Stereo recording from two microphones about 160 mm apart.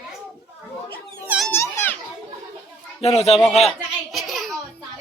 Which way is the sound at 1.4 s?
15° left (ahead or behind).